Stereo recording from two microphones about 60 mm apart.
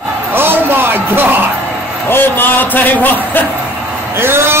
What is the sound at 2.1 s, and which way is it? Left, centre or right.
Speech, left.